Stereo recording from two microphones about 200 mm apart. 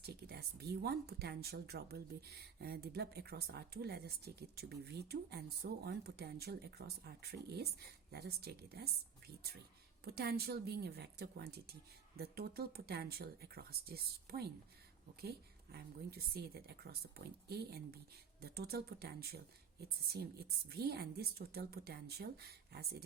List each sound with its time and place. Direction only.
0.0 s speech: 55° right (ahead or behind)
15.7 s speech: 50° right (ahead or behind)